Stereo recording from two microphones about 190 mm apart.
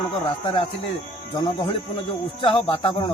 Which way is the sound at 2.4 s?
30° left (ahead or behind).